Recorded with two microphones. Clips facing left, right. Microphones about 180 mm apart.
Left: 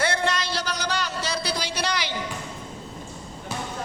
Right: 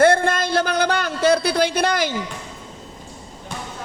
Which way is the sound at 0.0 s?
50° right (ahead or behind).